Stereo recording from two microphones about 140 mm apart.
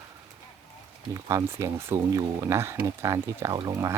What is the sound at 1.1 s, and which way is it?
Speech, 20° right (ahead or behind).